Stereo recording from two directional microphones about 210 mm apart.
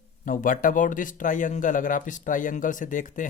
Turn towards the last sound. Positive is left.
turn(degrees=40)  # may be behind; listen again after turning